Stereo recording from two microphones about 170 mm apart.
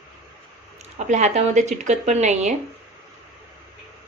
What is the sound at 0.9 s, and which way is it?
Speech, 40° right (ahead or behind).